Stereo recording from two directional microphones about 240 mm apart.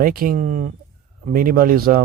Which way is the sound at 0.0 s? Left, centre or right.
Right.